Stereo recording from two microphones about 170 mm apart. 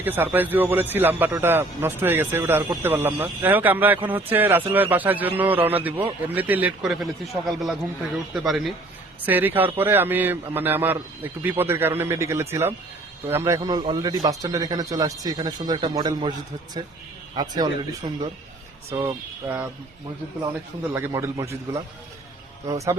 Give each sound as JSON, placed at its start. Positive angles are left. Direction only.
{"t": 0.0, "sound": "a man's voice", "side_deg": -10}
{"t": 13.6, "sound": "speech", "side_deg": -25}
{"t": 17.4, "sound": "speech", "side_deg": -25}
{"t": 18.9, "sound": "a man's voice", "side_deg": -15}
{"t": 20.9, "sound": "a man's voice", "side_deg": -15}